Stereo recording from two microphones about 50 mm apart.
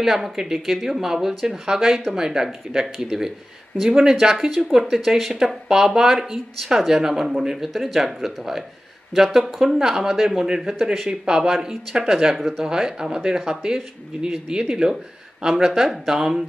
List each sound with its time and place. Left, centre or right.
0.0 s speech: centre
11.1 s speech: centre
12.3 s speech: centre
12.6 s speech: centre